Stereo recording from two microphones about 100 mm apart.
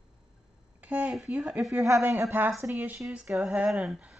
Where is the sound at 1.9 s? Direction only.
30° right (ahead or behind); by 4.2 s 5° right (ahead or behind).